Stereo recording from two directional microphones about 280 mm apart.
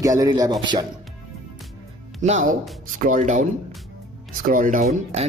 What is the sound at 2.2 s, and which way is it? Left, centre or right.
Speech, right.